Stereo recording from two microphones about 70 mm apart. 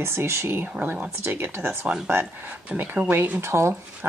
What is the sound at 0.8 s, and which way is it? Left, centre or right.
Speech, right.